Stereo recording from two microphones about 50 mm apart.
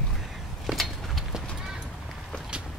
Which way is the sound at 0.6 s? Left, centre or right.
Centre.